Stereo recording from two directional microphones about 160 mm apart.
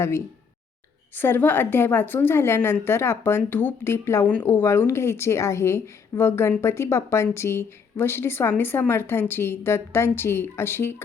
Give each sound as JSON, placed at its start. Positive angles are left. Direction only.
{"t": 1.1, "sound": "a woman's voice", "side_deg": 10}